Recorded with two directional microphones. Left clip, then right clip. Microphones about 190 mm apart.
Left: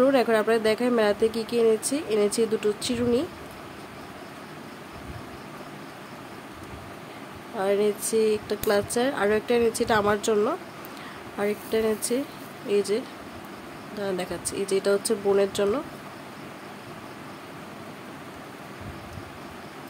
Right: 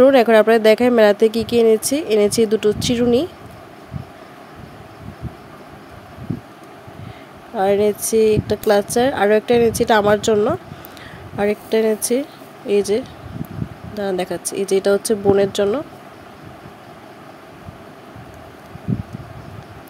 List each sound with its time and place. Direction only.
0.0 s speech: 40° right (ahead or behind)
7.5 s speech: 30° right (ahead or behind)